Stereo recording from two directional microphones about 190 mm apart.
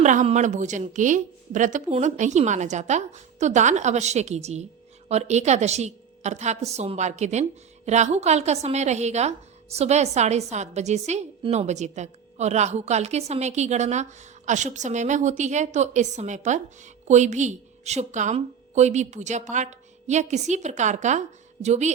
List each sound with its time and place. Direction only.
0.0 s a woman's voice: 40° right (ahead or behind)